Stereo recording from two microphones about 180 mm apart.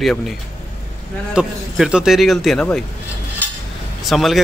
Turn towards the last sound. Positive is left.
turn(degrees=0)  # may be behind; listen again after turning